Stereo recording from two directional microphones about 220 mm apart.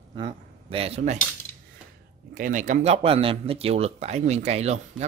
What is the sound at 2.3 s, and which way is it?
Speech, 35° right (ahead or behind).